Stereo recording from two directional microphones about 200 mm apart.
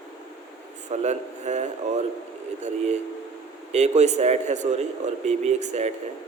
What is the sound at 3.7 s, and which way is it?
A man's voice, 35° right (ahead or behind).